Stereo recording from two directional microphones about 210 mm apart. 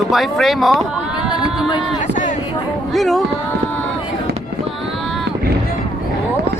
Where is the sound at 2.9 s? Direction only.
Centre (ahead or behind).